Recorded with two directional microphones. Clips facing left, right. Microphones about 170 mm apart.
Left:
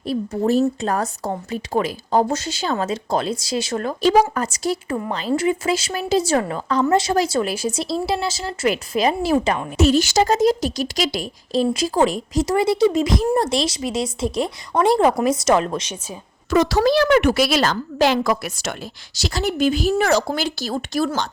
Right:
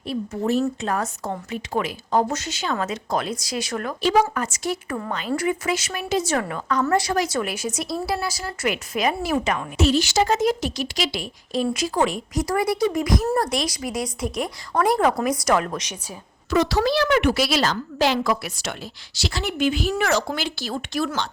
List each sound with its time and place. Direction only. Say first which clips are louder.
0.0 s a woman's voice: left 4 dB; 35° left (ahead or behind)
9.7 s a woman's voice: left 3 dB; 45° left (ahead or behind); by 16.1 s 25° left (ahead or behind)
16.5 s a woman's voice: left 4 dB; 45° left (ahead or behind)